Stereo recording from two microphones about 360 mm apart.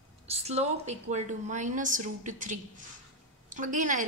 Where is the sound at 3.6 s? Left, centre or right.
Right.